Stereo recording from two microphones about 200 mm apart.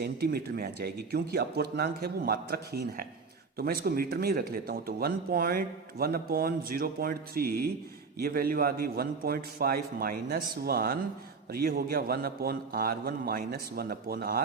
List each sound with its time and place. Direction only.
0.0 s speech: 50° right (ahead or behind)